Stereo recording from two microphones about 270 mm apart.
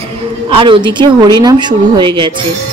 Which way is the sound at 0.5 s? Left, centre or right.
Centre.